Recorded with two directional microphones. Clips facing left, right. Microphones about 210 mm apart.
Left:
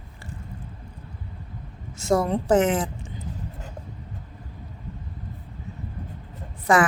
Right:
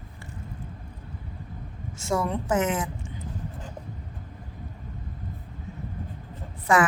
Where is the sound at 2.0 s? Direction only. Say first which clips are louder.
Left 5 dB; 35° left (ahead or behind).